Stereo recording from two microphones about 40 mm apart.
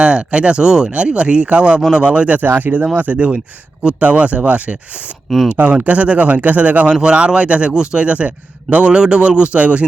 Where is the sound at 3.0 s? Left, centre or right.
Right.